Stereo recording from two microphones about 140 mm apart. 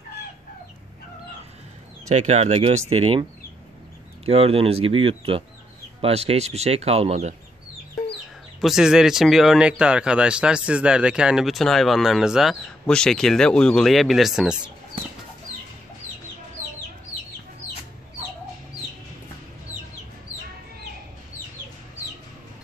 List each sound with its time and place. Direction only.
2.0 s speech: 55° right (ahead or behind)
4.3 s speech: 45° right (ahead or behind)
8.5 s speech: centre (ahead or behind)